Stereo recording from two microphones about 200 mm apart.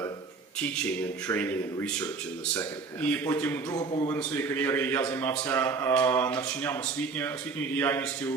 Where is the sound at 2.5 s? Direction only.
15° left (ahead or behind).